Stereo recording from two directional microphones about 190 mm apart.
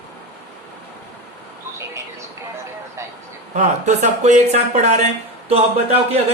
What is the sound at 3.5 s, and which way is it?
Speech, 40° right (ahead or behind).